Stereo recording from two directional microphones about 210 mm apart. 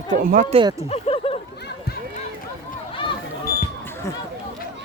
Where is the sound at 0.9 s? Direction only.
25° left (ahead or behind).